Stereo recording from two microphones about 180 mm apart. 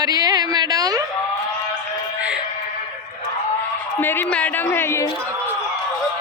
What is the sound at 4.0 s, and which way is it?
A woman's voice, 10° left (ahead or behind).